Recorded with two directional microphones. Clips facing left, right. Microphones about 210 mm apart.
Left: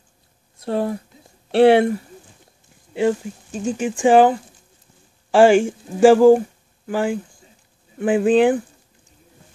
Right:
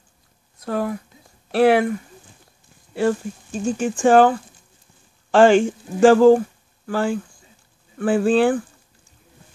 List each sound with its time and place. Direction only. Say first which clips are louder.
0.7 s speech: left 2 dB; 30° left (ahead or behind)
2.9 s speech: left 1 dB; 15° left (ahead or behind)